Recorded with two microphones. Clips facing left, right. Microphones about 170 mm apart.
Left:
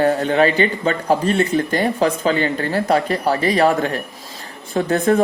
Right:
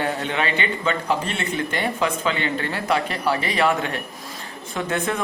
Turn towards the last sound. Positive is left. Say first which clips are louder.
# left 9 dB
turn(degrees=40)  # may be behind; listen again after turning